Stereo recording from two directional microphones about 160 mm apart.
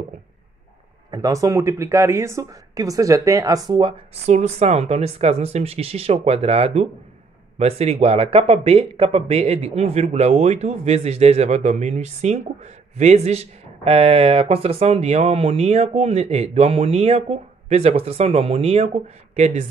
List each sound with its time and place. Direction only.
1.1 s speech: 20° right (ahead or behind)
4.3 s a man's voice: 45° right (ahead or behind)